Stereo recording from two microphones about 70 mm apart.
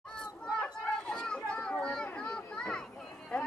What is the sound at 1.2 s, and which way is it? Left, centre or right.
Children playing, centre.